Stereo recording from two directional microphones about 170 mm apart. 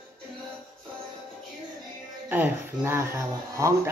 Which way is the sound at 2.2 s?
10° right (ahead or behind).